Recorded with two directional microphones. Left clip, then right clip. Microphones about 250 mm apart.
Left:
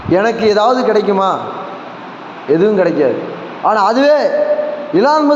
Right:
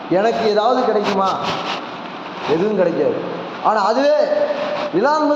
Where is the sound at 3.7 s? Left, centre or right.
Left.